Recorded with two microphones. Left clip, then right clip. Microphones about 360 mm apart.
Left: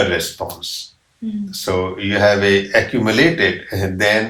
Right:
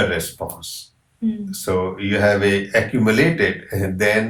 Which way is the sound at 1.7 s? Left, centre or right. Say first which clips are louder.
Left 2 dB; centre.